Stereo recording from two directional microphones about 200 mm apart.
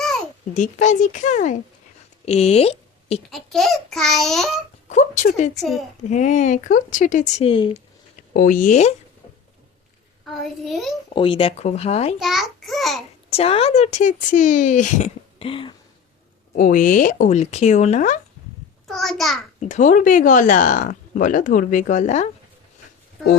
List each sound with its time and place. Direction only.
0.5 s speech: 40° left (ahead or behind)
3.2 s a child's voice: centre (ahead or behind)
4.9 s speech: 35° left (ahead or behind)
5.5 s a child's voice: centre (ahead or behind)
6.1 s speech: 35° left (ahead or behind)
8.3 s speech: 45° left (ahead or behind)
10.2 s a child's voice: centre (ahead or behind)
11.1 s speech: 25° left (ahead or behind)
12.2 s a child's voice: centre (ahead or behind)
13.3 s speech: 30° left (ahead or behind)
16.6 s speech: 40° left (ahead or behind)
18.9 s a child's voice: centre (ahead or behind)
19.5 s speech: 35° left (ahead or behind)